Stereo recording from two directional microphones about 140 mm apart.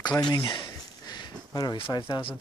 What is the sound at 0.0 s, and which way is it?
Speech, 30° left (ahead or behind).